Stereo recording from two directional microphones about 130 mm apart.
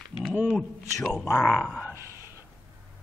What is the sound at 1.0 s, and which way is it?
Speech, centre (ahead or behind).